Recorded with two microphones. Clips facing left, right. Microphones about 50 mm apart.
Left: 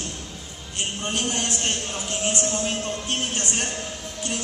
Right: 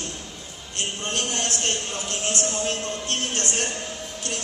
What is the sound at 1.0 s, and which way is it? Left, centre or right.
Speech, centre.